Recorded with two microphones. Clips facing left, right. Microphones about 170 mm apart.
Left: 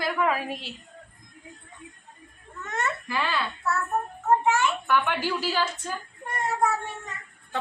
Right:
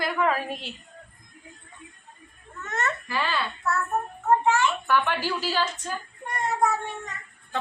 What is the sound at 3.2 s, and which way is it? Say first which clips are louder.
Speech: right 1 dB; 5° left (ahead or behind).